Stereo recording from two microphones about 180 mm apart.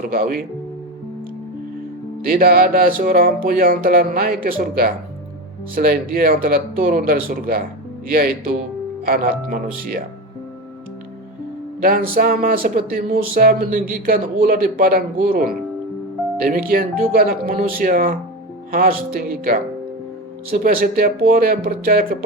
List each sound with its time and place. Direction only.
0.0 s speech: 50° right (ahead or behind)
2.2 s speech: 55° right (ahead or behind)
9.0 s speech: 50° right (ahead or behind)
11.8 s speech: 50° right (ahead or behind)
16.5 s speech: 55° right (ahead or behind)
20.6 s speech: 50° right (ahead or behind)